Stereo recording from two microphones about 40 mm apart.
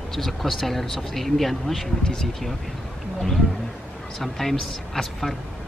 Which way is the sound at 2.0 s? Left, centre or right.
Centre.